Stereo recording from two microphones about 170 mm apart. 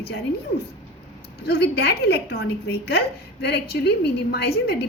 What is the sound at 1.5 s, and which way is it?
A woman's voice, 75° left (ahead or behind).